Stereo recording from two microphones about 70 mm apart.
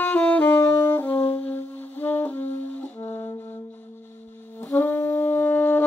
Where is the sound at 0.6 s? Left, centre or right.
Left.